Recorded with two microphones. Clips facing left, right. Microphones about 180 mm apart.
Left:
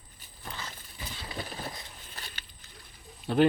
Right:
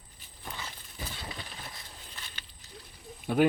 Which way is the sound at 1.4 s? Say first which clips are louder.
Left 7 dB; 40° left (ahead or behind).